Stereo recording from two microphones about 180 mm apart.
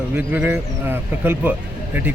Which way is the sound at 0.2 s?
10° right (ahead or behind).